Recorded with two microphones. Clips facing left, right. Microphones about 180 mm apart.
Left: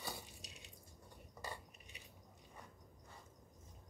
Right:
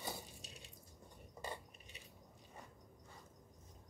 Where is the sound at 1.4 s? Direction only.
25° right (ahead or behind).